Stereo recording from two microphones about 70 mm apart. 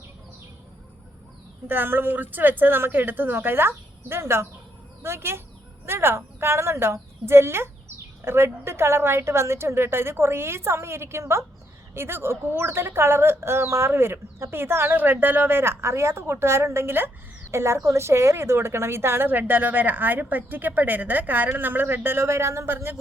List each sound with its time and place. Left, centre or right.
1.6 s a woman's voice: right